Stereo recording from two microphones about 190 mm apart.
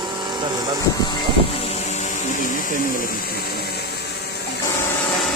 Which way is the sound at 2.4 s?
45° left (ahead or behind).